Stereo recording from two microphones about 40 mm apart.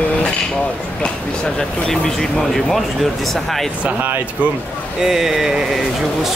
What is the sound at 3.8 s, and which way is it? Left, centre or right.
Speech, right.